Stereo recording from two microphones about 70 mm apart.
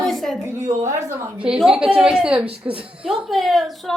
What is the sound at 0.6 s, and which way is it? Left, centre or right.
Speech, right.